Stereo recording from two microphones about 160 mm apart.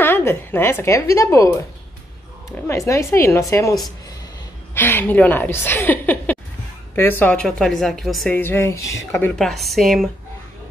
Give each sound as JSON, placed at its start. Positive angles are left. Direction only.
{"t": 0.0, "sound": "a woman's voice", "side_deg": 15}
{"t": 2.7, "sound": "a woman's voice", "side_deg": 20}
{"t": 4.7, "sound": "a woman's voice", "side_deg": 15}
{"t": 8.4, "sound": "a woman's voice", "side_deg": 15}
{"t": 9.3, "sound": "a woman's voice", "side_deg": 0}